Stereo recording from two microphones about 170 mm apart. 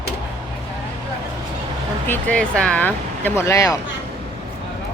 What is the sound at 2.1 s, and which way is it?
Speech, 10° left (ahead or behind).